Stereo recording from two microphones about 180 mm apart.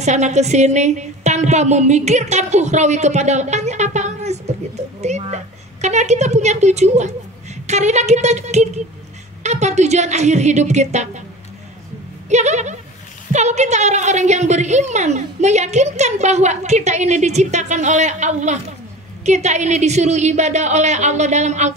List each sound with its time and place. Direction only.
0.0 s a woman's voice: 40° right (ahead or behind)
5.0 s a sound: 40° right (ahead or behind)
7.6 s a woman's voice: 40° right (ahead or behind)
12.3 s a woman's voice: 40° right (ahead or behind)